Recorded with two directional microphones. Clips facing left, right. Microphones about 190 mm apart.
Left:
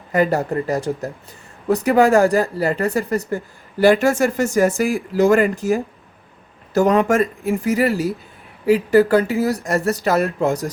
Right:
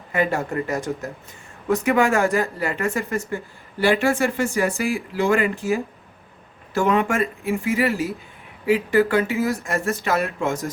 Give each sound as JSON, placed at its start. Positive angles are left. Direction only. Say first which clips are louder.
{"t": 0.1, "sound": "speech", "louder": "left 5 dB", "side_deg": 40}